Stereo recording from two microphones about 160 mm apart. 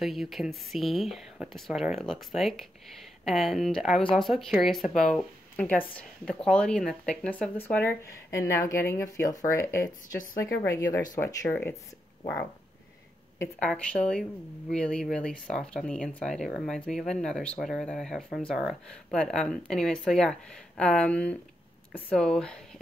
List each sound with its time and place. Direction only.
0.0 s speech: centre (ahead or behind)
13.6 s speech: 5° left (ahead or behind)